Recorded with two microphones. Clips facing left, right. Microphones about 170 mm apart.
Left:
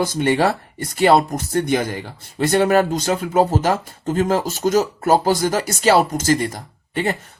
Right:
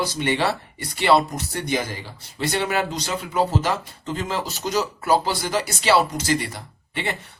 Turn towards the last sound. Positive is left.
turn(degrees=45)  # may be behind; listen again after turning